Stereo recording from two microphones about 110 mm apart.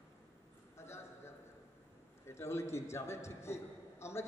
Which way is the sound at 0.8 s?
25° left (ahead or behind).